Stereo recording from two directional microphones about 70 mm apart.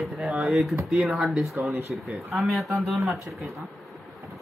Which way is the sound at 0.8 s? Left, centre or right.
Centre.